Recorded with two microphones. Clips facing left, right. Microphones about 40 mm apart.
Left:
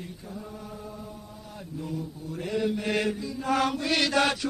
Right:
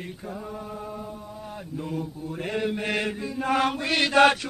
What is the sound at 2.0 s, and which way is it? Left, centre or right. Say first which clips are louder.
Chant: right 3 dB; right.